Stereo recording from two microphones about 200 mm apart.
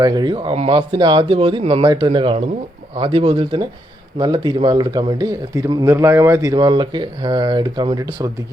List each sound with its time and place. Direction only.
0.0 s speech: 20° right (ahead or behind)